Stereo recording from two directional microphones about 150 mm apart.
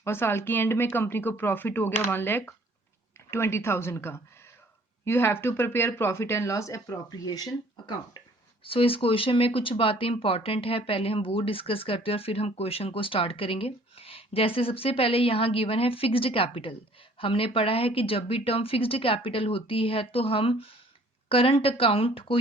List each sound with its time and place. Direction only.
0.0 s speech: 15° left (ahead or behind); by 22.4 s 35° left (ahead or behind)